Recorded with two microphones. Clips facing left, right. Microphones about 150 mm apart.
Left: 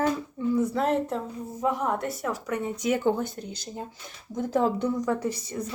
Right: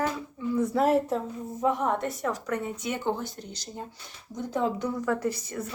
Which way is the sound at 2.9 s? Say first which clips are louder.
Left 6 dB; 50° left (ahead or behind).